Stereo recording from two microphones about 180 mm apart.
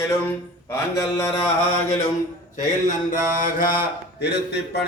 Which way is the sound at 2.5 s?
45° left (ahead or behind).